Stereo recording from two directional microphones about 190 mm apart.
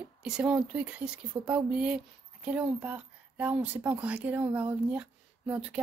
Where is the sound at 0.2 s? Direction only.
5° right (ahead or behind).